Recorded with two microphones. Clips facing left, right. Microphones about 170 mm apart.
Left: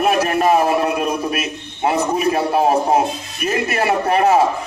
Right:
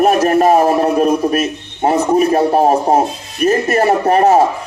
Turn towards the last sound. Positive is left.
turn(degrees=-40)  # may be behind; listen again after turning